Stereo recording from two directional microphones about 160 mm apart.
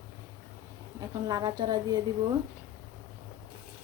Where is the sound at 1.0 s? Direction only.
25° right (ahead or behind).